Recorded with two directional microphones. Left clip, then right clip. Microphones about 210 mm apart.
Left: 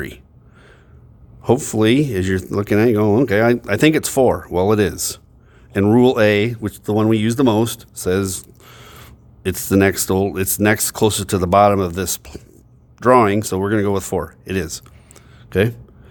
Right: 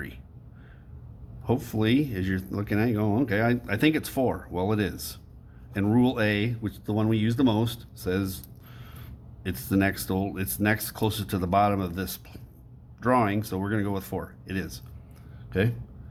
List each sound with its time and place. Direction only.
1.5 s speech: 55° left (ahead or behind)